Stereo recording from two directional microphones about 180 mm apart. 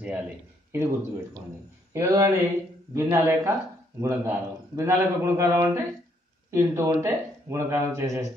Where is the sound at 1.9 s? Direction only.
20° right (ahead or behind).